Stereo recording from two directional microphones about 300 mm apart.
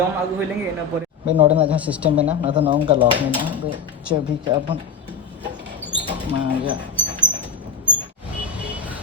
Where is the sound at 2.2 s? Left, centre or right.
Centre.